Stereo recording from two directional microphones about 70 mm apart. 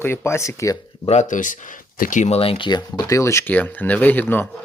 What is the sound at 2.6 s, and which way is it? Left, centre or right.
Speech, left.